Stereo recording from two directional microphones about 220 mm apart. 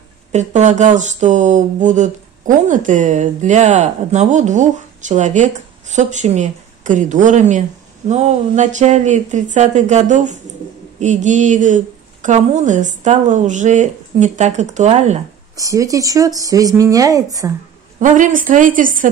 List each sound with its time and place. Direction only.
0.3 s speech: 30° right (ahead or behind)
15.5 s speech: 15° right (ahead or behind)
17.9 s speech: 35° right (ahead or behind)